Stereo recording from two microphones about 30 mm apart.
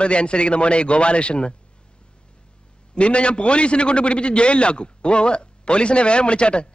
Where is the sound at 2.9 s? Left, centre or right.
Left.